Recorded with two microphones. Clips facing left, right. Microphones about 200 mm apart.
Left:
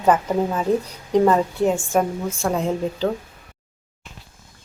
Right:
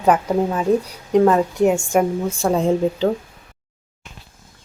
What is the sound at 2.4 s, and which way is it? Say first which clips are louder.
Speech: right 5 dB; 30° right (ahead or behind).